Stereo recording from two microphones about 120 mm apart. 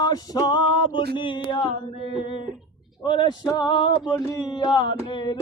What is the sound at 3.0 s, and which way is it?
Speech, 40° left (ahead or behind).